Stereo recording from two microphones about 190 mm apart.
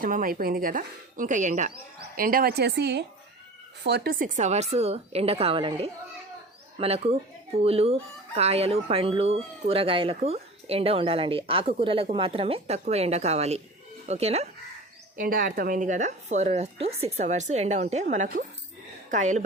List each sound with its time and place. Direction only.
0.0 s speech: 45° right (ahead or behind)
15.1 s speech: 50° right (ahead or behind)